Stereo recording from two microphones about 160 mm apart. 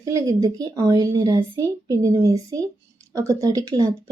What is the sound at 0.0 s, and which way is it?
Speech, 20° right (ahead or behind).